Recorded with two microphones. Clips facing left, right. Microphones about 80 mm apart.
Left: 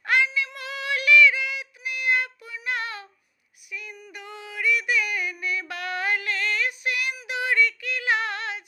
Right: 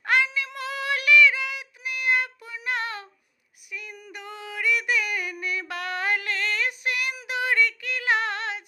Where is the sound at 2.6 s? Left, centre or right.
Right.